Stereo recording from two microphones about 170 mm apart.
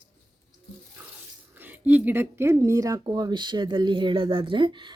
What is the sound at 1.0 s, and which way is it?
Bathtub, 15° right (ahead or behind).